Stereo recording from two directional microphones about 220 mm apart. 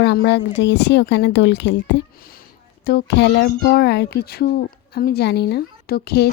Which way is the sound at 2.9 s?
50° left (ahead or behind).